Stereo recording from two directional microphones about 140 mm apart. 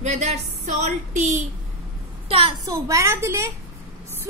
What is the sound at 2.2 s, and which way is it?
Speech, 40° right (ahead or behind).